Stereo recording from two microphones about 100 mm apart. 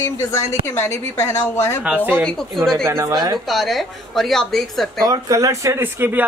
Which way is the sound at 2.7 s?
25° right (ahead or behind).